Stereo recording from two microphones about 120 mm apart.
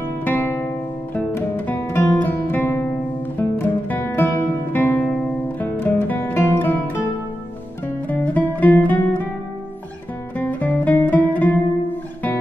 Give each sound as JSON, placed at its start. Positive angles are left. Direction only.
{"t": 0.0, "sound": "music", "side_deg": 15}
{"t": 8.1, "sound": "music", "side_deg": 15}
{"t": 10.3, "sound": "music", "side_deg": 15}